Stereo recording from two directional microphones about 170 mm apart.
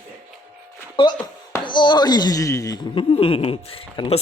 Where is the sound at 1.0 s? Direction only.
30° left (ahead or behind).